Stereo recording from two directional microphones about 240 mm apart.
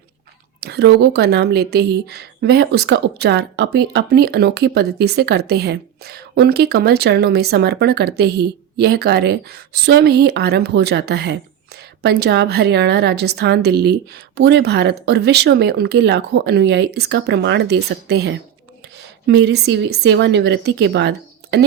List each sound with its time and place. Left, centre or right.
0.6 s speech: right